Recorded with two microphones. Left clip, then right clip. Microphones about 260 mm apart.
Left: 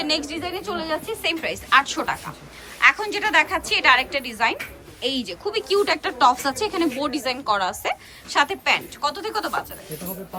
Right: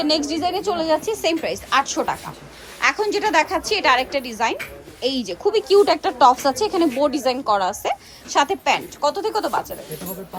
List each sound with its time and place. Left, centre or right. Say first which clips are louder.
0.0 s a woman's voice: right 5 dB; centre